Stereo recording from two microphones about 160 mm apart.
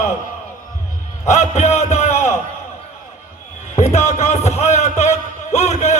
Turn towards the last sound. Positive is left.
turn(degrees=45)  # may be behind; listen again after turning